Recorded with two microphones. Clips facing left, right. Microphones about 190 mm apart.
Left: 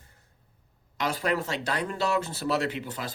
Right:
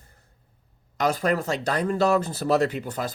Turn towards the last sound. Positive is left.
turn(degrees=-45)  # may be behind; listen again after turning